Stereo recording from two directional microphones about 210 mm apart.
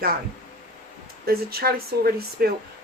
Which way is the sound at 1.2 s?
45° right (ahead or behind).